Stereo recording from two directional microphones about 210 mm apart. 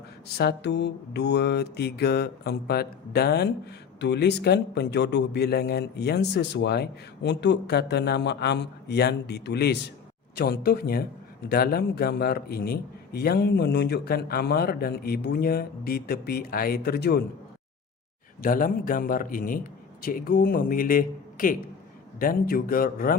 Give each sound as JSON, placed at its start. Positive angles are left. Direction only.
{"t": 0.3, "sound": "mantra", "side_deg": 50}
{"t": 18.4, "sound": "a man's voice", "side_deg": 40}
{"t": 22.2, "sound": "mantra", "side_deg": 45}